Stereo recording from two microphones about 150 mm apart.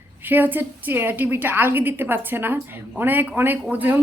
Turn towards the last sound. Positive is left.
turn(degrees=-10)  # may be behind; listen again after turning